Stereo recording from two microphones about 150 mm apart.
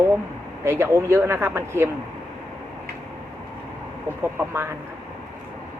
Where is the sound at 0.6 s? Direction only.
20° right (ahead or behind).